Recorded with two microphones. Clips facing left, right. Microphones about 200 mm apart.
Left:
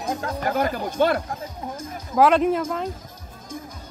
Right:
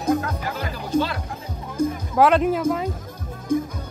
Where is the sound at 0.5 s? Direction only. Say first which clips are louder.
Left 5 dB; 50° left (ahead or behind).